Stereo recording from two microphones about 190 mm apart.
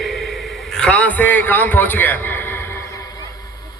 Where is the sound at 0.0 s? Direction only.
Centre (ahead or behind).